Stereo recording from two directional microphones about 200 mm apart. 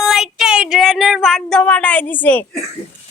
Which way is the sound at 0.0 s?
Centre (ahead or behind).